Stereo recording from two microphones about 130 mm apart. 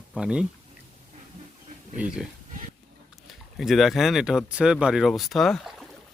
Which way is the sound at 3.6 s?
Centre (ahead or behind).